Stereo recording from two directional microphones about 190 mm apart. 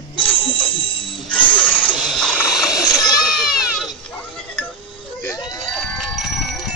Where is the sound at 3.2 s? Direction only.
Centre (ahead or behind).